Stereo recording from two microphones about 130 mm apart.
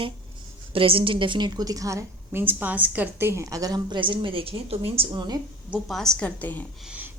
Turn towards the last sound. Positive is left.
turn(degrees=-10)  # may be behind; listen again after turning